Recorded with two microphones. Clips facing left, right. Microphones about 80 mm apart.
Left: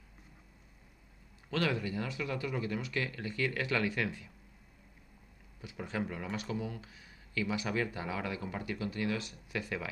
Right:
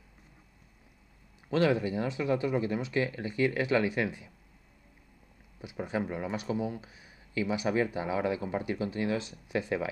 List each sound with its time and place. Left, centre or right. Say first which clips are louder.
1.5 s speech: right 7 dB; right
5.6 s speech: right 4 dB; right